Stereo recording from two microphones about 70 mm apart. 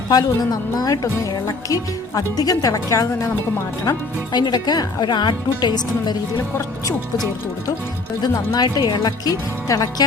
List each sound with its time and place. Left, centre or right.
0.1 s a woman's voice: left
3.8 s speech: left
8.2 s a woman's voice: left
9.6 s speech: left